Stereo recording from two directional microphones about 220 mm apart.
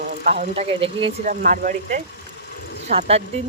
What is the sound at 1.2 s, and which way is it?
Speech, 35° right (ahead or behind).